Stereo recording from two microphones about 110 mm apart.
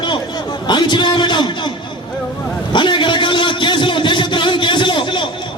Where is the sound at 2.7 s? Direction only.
45° left (ahead or behind).